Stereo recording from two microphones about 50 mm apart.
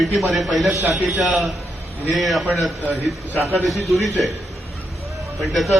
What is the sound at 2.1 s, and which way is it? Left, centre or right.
Speech, centre.